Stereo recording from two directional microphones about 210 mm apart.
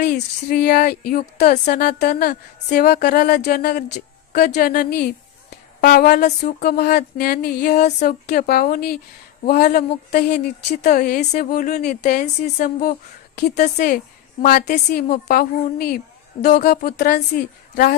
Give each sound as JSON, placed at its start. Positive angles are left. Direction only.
{"t": 0.0, "sound": "a woman's voice", "side_deg": 50}